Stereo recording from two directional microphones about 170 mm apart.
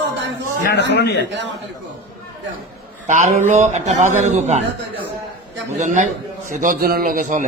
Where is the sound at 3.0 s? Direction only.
45° right (ahead or behind).